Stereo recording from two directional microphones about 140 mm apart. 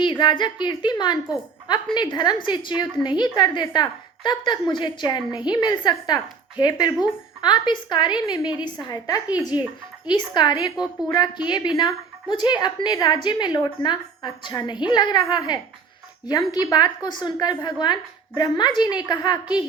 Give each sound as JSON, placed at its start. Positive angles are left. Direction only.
{"t": 0.0, "sound": "a woman's voice", "side_deg": 35}